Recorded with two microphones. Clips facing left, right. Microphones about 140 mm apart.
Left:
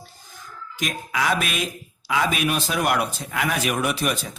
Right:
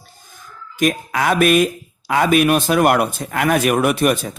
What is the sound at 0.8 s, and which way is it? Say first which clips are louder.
A man's voice: right 8 dB; 55° right (ahead or behind).